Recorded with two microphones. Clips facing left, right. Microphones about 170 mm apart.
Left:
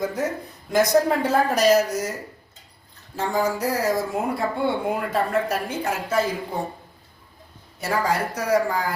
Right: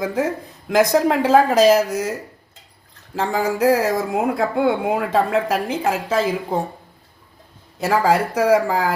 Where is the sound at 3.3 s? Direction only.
90° right.